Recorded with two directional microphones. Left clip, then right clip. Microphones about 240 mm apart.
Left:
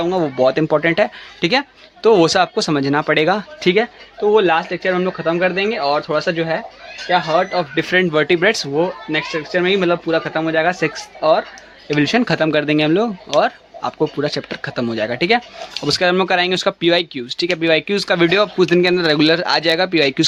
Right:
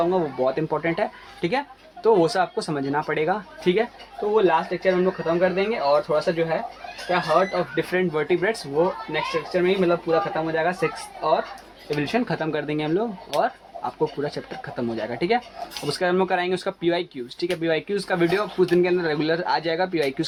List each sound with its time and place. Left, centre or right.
0.0 s speech: left